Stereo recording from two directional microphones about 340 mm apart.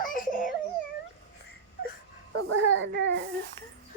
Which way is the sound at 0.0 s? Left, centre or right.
Left.